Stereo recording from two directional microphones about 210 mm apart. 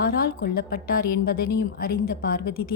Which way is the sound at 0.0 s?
50° left (ahead or behind).